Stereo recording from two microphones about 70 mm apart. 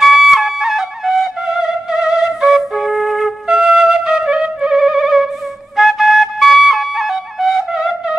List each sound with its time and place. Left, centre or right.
0.0 s music: centre
5.8 s flute: centre